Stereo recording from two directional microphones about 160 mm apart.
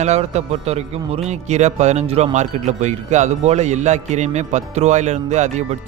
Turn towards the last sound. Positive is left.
turn(degrees=-45)  # may be behind; listen again after turning